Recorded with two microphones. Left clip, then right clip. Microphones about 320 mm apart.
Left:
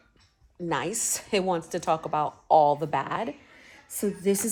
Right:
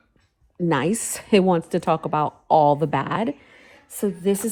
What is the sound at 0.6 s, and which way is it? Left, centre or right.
Speech, right.